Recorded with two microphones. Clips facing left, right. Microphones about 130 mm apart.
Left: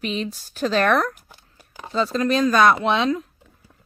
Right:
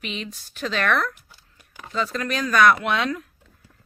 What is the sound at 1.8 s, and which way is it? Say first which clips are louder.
Speech: left 5 dB; 30° left (ahead or behind).